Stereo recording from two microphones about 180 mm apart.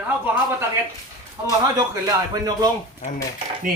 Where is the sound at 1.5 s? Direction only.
20° right (ahead or behind).